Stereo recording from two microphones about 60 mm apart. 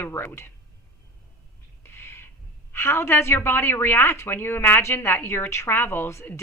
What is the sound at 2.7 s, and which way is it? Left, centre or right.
A woman's voice, left.